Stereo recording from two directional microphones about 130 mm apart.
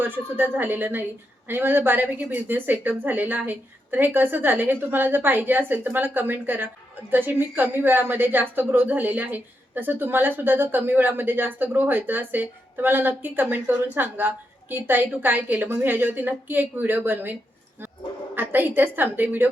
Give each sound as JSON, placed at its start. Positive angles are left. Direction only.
{"t": 0.0, "sound": "a woman's voice", "side_deg": -15}
{"t": 18.3, "sound": "a woman's voice", "side_deg": -15}